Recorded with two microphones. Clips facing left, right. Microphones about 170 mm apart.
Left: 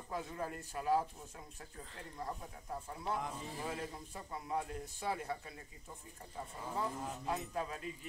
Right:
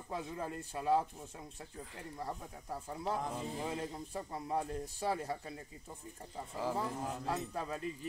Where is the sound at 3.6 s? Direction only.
25° right (ahead or behind).